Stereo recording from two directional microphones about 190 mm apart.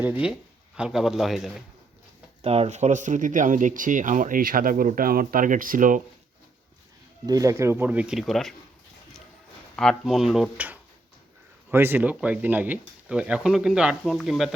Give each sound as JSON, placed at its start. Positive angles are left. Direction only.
{"t": 0.0, "sound": "speech", "side_deg": -10}
{"t": 2.4, "sound": "speech", "side_deg": -30}
{"t": 7.3, "sound": "speech", "side_deg": -15}
{"t": 9.7, "sound": "speech", "side_deg": 0}